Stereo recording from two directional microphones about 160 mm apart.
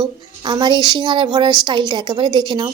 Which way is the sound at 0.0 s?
25° right (ahead or behind).